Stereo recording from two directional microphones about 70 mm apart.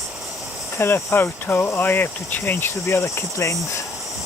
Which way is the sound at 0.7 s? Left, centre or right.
Left.